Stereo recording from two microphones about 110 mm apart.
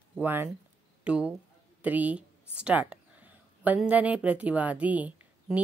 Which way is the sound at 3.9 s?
15° right (ahead or behind).